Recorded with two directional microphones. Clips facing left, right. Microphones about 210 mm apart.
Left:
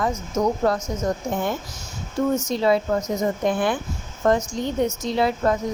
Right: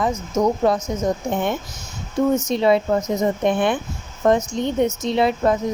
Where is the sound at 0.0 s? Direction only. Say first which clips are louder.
Right 3 dB; 20° right (ahead or behind).